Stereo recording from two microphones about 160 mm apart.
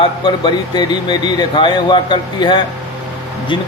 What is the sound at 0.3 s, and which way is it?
Speech, 30° left (ahead or behind).